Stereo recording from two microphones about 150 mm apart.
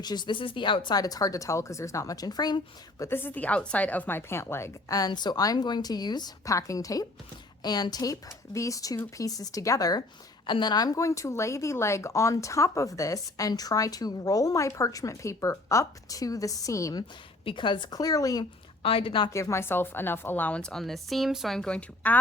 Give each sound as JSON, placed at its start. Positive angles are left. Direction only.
{"t": 0.0, "sound": "speech", "side_deg": 30}
{"t": 3.0, "sound": "speech", "side_deg": 15}
{"t": 17.4, "sound": "speech", "side_deg": 35}
{"t": 18.8, "sound": "speech", "side_deg": 40}
{"t": 19.3, "sound": "a woman's voice", "side_deg": 20}